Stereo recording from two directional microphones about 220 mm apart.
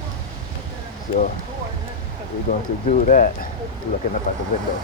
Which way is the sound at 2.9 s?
35° left (ahead or behind).